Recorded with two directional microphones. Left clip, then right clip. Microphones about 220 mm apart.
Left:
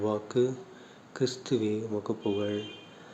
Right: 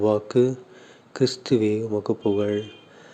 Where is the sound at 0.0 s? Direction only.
30° right (ahead or behind).